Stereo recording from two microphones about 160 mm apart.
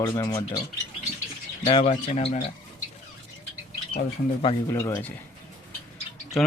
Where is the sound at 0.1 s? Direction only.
20° left (ahead or behind).